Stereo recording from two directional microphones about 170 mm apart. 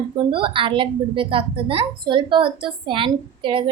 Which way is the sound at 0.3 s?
30° right (ahead or behind).